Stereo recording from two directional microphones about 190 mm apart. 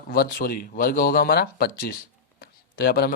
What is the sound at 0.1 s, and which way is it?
Speech, 50° left (ahead or behind).